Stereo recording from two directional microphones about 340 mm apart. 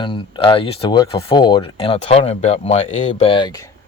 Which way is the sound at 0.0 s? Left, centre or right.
Centre.